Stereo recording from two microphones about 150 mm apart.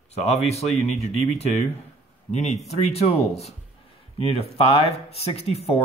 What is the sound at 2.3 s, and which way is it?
Speech, 50° left (ahead or behind).